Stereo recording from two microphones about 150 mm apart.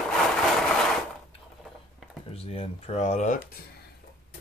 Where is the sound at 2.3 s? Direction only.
40° left (ahead or behind).